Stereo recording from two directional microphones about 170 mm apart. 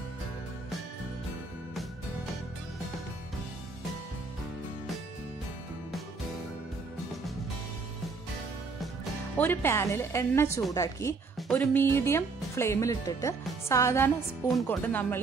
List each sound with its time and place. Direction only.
9.4 s a woman's voice: 15° left (ahead or behind)
11.3 s a woman's voice: 5° left (ahead or behind)